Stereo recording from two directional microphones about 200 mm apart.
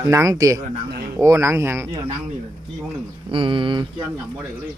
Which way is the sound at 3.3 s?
25° right (ahead or behind).